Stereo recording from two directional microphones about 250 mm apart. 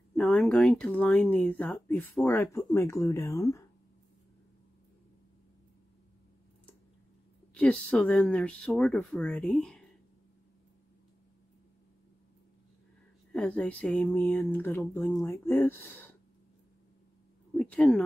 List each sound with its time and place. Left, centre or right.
0.1 s speech: centre
7.5 s speech: centre
13.3 s speech: centre
15.2 s speech: centre
17.6 s speech: centre